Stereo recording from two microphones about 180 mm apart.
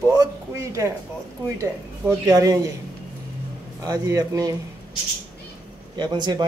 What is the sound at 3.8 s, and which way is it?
Speech, 20° right (ahead or behind).